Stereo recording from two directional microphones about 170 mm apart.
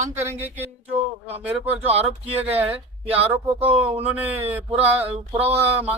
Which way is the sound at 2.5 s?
35° right (ahead or behind).